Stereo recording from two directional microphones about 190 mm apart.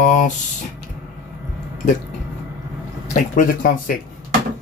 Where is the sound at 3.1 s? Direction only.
45° left (ahead or behind).